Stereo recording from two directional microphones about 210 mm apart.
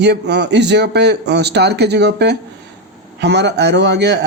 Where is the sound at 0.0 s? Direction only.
55° right (ahead or behind).